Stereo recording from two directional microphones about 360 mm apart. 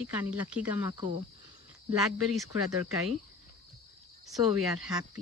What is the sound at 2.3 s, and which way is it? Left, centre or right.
Speech, centre.